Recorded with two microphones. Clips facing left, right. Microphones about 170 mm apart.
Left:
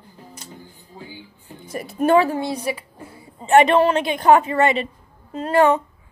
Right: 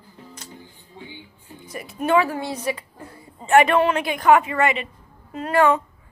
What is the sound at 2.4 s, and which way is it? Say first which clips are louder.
Speech: left 2 dB; 10° left (ahead or behind).